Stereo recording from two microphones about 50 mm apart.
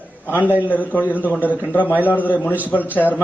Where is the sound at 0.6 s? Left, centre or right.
Left.